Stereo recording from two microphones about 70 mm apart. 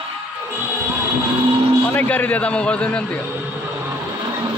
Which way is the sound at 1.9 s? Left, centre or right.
Left.